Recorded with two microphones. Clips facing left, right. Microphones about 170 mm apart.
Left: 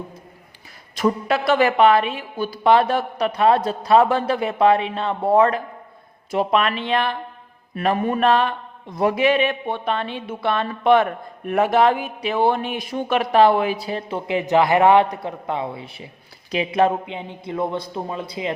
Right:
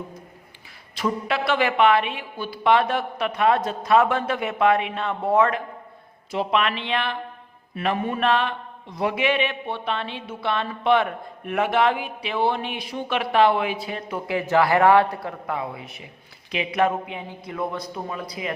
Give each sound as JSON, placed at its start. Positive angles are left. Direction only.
{"t": 0.9, "sound": "speech", "side_deg": 45}
{"t": 6.3, "sound": "a man's voice", "side_deg": 45}